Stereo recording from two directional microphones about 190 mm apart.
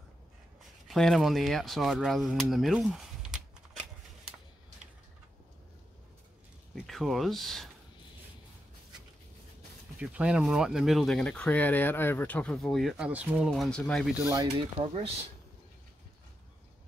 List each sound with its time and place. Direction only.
0.8 s speech: centre (ahead or behind)
6.7 s speech: centre (ahead or behind)
9.9 s speech: 5° right (ahead or behind)
13.5 s speech: 5° left (ahead or behind)
14.4 s speech: 30° right (ahead or behind)